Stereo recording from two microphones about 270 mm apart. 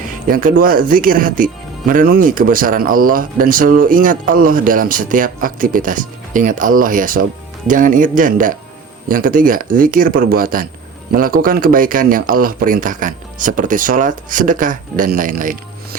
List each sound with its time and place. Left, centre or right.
0.1 s speech: right